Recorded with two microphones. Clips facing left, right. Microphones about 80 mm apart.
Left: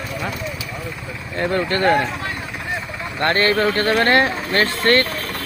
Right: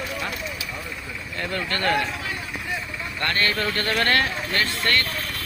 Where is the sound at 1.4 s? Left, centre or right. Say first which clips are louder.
Left 8 dB; left.